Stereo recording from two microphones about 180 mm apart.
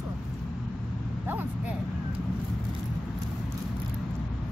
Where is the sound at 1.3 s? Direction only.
10° right (ahead or behind).